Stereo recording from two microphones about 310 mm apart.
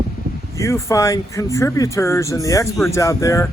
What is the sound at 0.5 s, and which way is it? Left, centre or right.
Speech, centre.